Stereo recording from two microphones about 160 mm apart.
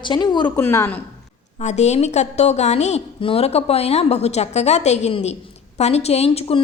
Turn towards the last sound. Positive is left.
turn(degrees=35)  # may be behind; listen again after turning